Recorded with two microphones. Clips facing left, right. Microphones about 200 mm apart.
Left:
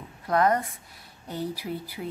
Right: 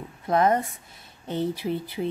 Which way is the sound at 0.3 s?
25° right (ahead or behind).